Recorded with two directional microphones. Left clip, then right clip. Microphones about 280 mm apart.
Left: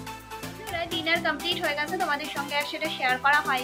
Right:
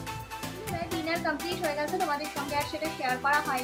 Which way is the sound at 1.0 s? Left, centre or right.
Centre.